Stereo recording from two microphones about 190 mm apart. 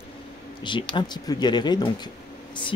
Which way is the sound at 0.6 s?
25° left (ahead or behind).